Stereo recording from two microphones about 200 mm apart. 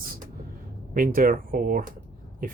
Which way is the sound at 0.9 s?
45° right (ahead or behind).